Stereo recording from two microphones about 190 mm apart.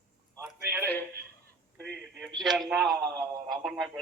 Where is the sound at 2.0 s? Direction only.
Centre (ahead or behind).